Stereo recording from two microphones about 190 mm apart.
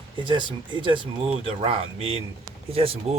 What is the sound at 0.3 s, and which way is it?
Speech, 25° right (ahead or behind).